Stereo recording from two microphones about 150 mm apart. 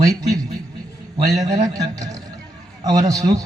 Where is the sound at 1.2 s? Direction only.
25° right (ahead or behind).